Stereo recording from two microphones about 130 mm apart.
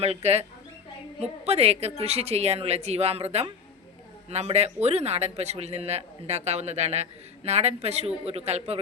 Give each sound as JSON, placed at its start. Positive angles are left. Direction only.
{"t": 0.0, "sound": "a man's voice", "side_deg": -55}